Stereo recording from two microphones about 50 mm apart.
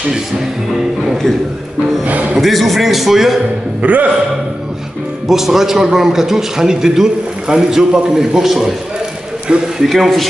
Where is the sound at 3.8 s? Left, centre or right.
Right.